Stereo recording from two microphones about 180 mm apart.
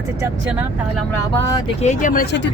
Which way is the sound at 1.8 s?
45° left (ahead or behind).